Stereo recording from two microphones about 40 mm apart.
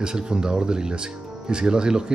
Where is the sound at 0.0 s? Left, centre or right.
Centre.